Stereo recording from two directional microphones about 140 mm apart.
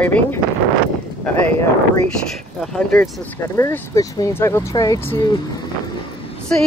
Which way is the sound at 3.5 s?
20° left (ahead or behind).